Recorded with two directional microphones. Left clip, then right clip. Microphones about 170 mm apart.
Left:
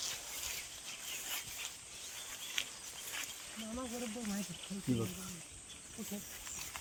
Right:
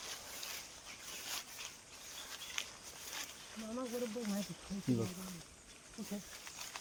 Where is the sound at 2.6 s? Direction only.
20° right (ahead or behind).